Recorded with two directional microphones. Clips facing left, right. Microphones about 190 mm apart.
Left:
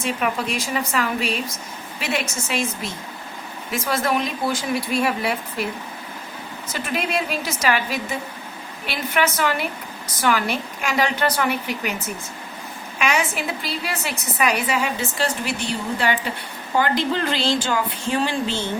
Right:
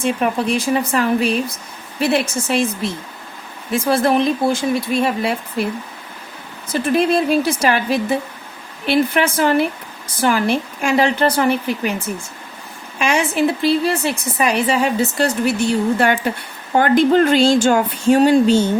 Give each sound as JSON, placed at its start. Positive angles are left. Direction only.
{"t": 0.0, "sound": "a woman's voice", "side_deg": -30}
{"t": 6.8, "sound": "a woman's voice", "side_deg": -30}
{"t": 9.1, "sound": "a woman's voice", "side_deg": -30}
{"t": 16.0, "sound": "speech", "side_deg": -50}